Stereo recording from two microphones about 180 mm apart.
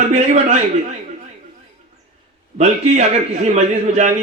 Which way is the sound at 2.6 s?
40° right (ahead or behind).